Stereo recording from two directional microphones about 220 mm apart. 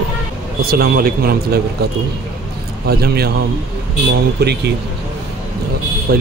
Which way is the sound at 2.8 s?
45° right (ahead or behind).